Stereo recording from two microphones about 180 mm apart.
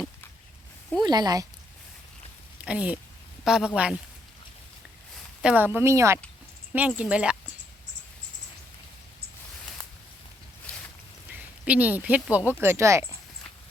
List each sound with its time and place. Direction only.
1.0 s speech: 20° right (ahead or behind)
2.6 s a man's voice: 5° right (ahead or behind)
5.4 s speech: 5° right (ahead or behind)
11.3 s a sound: 10° right (ahead or behind)
12.5 s speech: 10° right (ahead or behind)